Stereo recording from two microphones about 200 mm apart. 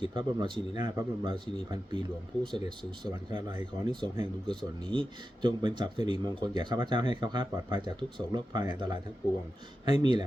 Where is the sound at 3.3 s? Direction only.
25° right (ahead or behind).